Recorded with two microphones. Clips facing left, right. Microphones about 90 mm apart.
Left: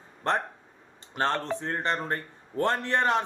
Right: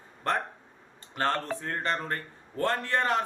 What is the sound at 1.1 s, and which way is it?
A man's voice, 20° left (ahead or behind).